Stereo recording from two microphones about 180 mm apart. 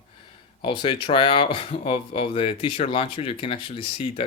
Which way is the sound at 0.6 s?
25° left (ahead or behind).